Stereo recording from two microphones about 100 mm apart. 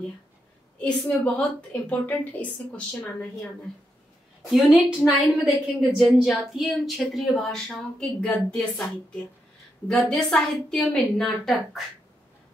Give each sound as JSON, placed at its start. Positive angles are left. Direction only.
{"t": 0.7, "sound": "a woman's voice", "side_deg": 10}
{"t": 4.5, "sound": "a woman's voice", "side_deg": -5}
{"t": 9.8, "sound": "a woman's voice", "side_deg": 10}